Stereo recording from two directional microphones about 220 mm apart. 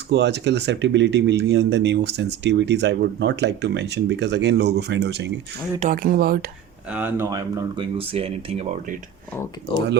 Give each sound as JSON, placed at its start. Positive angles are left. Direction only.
{"t": 0.1, "sound": "speech", "side_deg": -50}
{"t": 6.9, "sound": "speech", "side_deg": -10}